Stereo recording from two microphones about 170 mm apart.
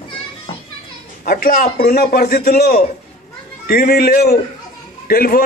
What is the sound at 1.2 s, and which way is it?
A man's voice, 55° left (ahead or behind).